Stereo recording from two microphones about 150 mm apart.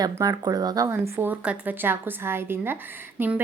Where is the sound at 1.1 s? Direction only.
10° right (ahead or behind).